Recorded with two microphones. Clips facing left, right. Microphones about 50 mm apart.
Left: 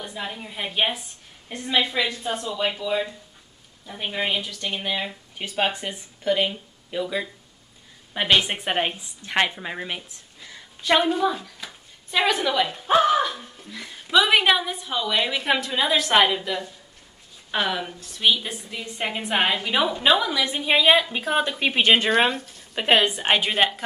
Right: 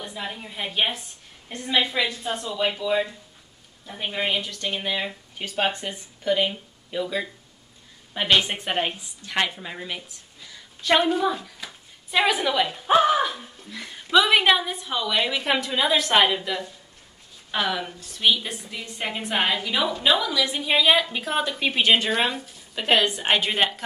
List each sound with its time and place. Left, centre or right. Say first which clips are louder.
0.0 s a woman's voice: left 1 dB; centre
8.1 s a woman's voice: left 1 dB; centre
10.8 s a woman's voice: even; centre
21.8 s a woman's voice: left 3 dB; left; by 23.8 s centre